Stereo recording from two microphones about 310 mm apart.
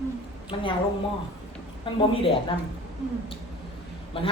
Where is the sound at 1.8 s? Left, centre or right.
Centre.